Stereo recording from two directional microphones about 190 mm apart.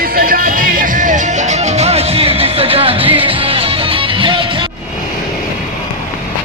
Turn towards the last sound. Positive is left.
turn(degrees=-25)  # may be behind; listen again after turning